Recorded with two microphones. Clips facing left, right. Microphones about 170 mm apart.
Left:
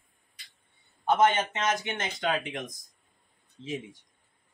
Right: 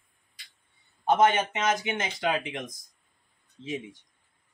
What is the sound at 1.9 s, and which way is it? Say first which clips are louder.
Speech: right 2 dB; centre (ahead or behind).